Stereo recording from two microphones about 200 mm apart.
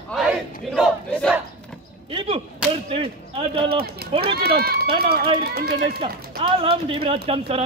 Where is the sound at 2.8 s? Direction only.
30° right (ahead or behind).